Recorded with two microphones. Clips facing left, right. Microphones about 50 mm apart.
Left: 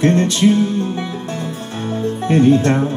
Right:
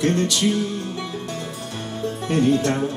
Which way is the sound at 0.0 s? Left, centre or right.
Left.